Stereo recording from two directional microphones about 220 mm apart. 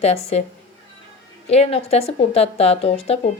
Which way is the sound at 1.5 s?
25° left (ahead or behind).